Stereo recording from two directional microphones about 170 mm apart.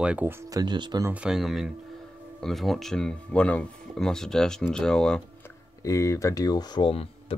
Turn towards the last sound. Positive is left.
turn(degrees=30)  # may be behind; listen again after turning